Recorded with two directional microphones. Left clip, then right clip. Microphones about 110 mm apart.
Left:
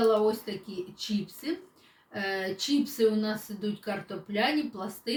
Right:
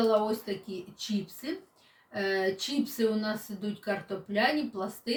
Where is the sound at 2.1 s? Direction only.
25° right (ahead or behind).